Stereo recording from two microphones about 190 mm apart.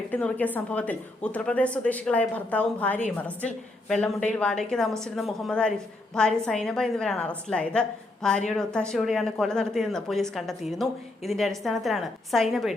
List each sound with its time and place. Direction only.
0.1 s a woman's voice: 5° left (ahead or behind)